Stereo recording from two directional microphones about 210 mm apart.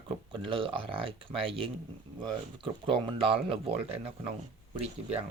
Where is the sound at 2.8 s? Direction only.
25° right (ahead or behind).